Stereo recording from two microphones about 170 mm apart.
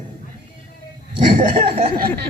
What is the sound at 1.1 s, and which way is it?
Speech, 30° right (ahead or behind).